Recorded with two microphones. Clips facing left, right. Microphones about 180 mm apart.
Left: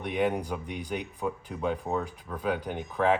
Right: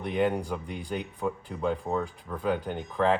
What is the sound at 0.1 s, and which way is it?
Speech, 5° left (ahead or behind).